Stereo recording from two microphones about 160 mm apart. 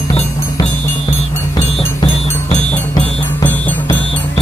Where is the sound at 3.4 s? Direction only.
15° left (ahead or behind).